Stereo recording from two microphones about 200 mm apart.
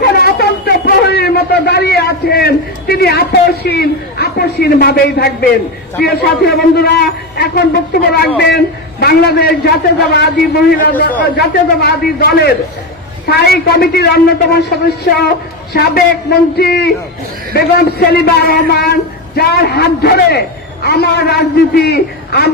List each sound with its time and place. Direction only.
0.0 s a sound: 50° left (ahead or behind)
6.0 s a man's voice: 50° left (ahead or behind)
15.7 s a man's voice: 50° left (ahead or behind)